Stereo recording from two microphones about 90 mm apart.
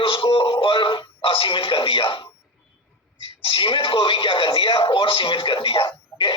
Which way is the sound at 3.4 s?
75° left (ahead or behind).